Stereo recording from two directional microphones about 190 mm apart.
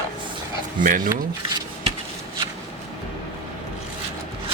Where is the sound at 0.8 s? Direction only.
45° right (ahead or behind).